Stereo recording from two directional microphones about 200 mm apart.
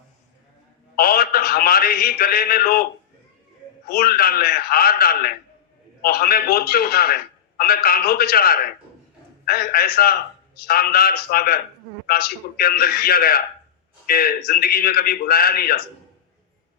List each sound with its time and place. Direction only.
0.9 s a man's voice: 50° left (ahead or behind)
3.8 s a man's voice: 50° left (ahead or behind)